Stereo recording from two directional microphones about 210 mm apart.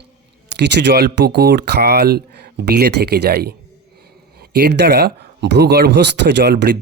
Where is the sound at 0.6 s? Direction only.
55° right (ahead or behind).